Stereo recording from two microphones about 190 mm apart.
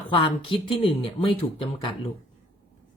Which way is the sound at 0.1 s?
25° left (ahead or behind).